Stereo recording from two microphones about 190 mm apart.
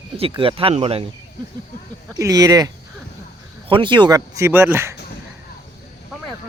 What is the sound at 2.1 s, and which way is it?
Speech, 20° right (ahead or behind).